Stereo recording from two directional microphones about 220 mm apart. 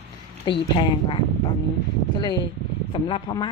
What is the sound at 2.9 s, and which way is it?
Speech, 20° left (ahead or behind).